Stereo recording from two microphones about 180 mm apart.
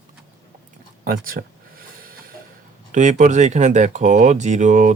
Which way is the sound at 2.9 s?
40° right (ahead or behind).